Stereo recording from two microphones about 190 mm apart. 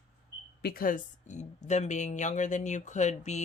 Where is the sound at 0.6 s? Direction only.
55° left (ahead or behind).